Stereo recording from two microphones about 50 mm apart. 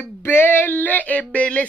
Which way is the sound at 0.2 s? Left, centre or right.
Left.